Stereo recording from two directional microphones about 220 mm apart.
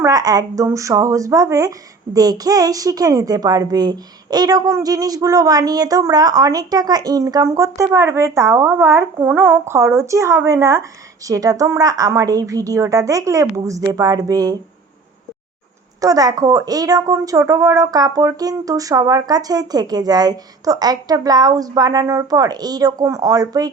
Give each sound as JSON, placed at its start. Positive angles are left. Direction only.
{"t": 0.0, "sound": "a woman's voice", "side_deg": -15}
{"t": 16.0, "sound": "a woman's voice", "side_deg": -15}